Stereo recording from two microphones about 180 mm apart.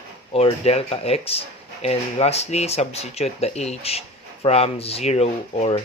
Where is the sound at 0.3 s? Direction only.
35° left (ahead or behind).